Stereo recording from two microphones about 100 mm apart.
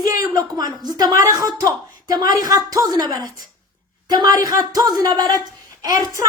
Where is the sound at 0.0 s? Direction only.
35° right (ahead or behind).